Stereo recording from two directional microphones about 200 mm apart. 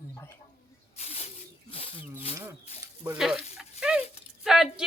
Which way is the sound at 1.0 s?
30° left (ahead or behind).